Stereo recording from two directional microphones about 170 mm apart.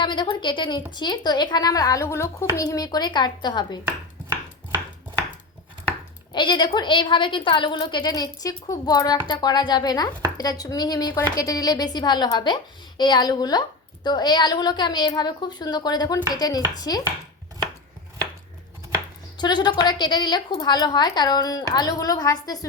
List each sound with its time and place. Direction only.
0.0 s a woman's voice: 25° left (ahead or behind)
6.3 s a woman's voice: 25° left (ahead or behind)
19.4 s a woman's voice: 25° left (ahead or behind)